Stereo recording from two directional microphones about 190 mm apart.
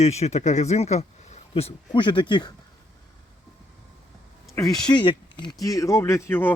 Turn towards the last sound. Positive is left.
turn(degrees=10)  # may be behind; listen again after turning